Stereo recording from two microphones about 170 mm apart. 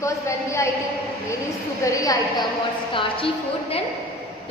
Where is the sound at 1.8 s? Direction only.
20° left (ahead or behind).